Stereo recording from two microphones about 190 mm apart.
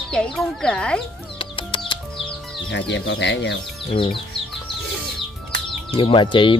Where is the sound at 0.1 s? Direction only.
5° left (ahead or behind).